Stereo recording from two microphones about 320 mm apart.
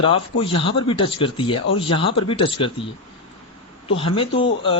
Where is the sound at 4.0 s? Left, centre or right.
Centre.